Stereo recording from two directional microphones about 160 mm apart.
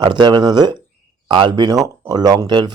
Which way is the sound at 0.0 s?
30° right (ahead or behind).